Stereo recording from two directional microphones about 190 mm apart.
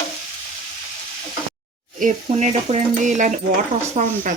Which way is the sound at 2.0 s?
40° right (ahead or behind).